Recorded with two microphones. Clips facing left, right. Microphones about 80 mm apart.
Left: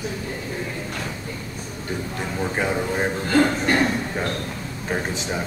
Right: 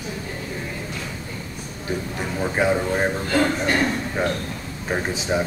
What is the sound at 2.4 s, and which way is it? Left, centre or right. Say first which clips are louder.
Speech: right 3 dB; centre.